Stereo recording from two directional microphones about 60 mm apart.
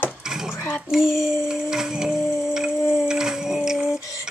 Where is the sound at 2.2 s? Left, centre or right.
Left.